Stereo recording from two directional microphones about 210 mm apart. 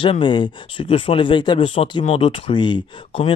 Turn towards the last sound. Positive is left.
turn(degrees=25)  # may be behind; listen again after turning